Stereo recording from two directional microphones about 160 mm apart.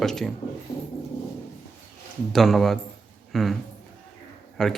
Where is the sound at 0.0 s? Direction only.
Centre (ahead or behind).